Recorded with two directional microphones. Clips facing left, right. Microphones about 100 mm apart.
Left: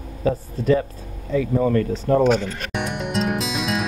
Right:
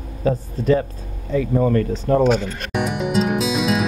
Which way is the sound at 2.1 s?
15° right (ahead or behind).